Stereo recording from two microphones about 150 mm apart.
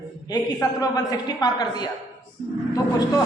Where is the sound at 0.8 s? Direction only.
25° left (ahead or behind).